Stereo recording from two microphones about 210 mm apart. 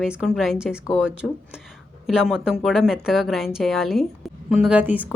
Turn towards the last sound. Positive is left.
turn(degrees=-5)  # may be behind; listen again after turning